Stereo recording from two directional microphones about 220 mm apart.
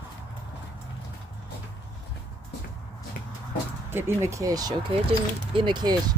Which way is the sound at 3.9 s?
10° right (ahead or behind).